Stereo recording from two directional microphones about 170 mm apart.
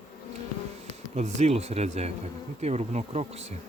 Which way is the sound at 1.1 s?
40° right (ahead or behind).